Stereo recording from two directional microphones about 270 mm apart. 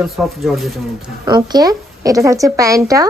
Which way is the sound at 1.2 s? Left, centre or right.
Centre.